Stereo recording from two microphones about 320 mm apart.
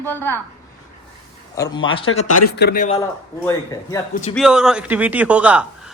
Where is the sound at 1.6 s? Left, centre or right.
Centre.